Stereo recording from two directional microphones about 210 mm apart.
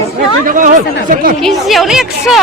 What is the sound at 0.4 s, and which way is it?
Speech, 40° right (ahead or behind).